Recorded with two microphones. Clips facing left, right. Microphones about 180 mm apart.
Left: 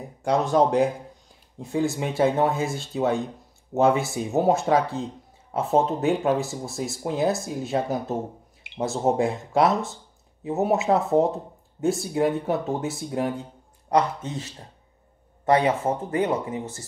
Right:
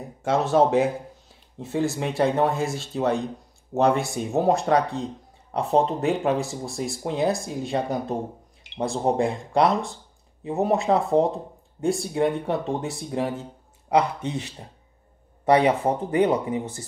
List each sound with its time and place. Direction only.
0.0 s speech: centre (ahead or behind)